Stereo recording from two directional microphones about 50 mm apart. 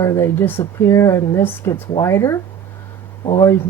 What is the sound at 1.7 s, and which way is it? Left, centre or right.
Speech, left.